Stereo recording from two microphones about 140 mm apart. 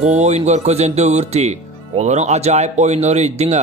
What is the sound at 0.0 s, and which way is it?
Speech, 55° right (ahead or behind).